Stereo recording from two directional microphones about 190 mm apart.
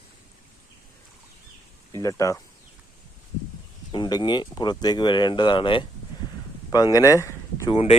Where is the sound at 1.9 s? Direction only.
15° left (ahead or behind).